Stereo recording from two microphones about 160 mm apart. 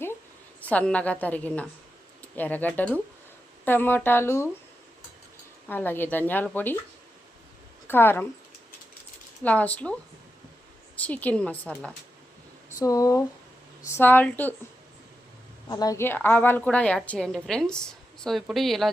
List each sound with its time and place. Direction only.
0.6 s a woman's voice: 10° left (ahead or behind)
5.6 s a woman's voice: 10° left (ahead or behind)
7.9 s a woman's voice: 15° left (ahead or behind)
9.4 s a woman's voice: 10° left (ahead or behind)
12.7 s a woman's voice: 20° left (ahead or behind)
15.7 s a woman's voice: 20° left (ahead or behind); by 18.9 s centre (ahead or behind)